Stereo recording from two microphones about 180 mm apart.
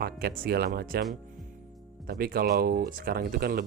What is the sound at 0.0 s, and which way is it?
Speech, 60° right (ahead or behind).